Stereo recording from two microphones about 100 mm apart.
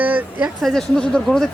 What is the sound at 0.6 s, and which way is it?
Speech, centre (ahead or behind).